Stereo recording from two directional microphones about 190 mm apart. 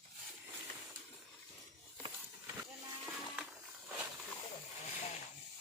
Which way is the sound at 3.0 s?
5° right (ahead or behind).